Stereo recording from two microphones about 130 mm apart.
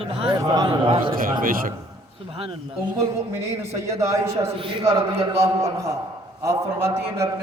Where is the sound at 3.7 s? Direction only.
25° right (ahead or behind).